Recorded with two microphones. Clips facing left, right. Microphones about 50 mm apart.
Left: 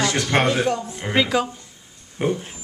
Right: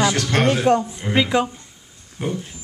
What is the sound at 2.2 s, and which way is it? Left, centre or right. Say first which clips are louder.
Speech: left 3 dB; left.